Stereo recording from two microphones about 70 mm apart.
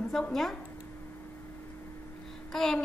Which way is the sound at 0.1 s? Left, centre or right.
Centre.